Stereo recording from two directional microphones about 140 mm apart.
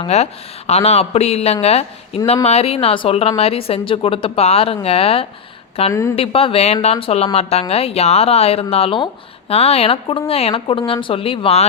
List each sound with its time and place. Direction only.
0.0 s speech: 50° left (ahead or behind)
5.9 s a woman's voice: 20° left (ahead or behind)
6.1 s speech: 45° left (ahead or behind)